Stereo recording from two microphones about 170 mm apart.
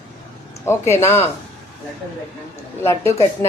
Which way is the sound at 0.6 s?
15° left (ahead or behind).